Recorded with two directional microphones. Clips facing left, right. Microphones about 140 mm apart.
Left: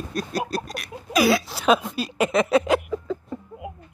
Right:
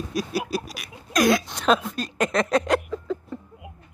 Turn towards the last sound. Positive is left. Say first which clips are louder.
# left 1 dB
turn(degrees=5)  # may be behind; listen again after turning